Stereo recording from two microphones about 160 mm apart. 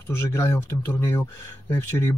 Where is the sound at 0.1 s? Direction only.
15° left (ahead or behind).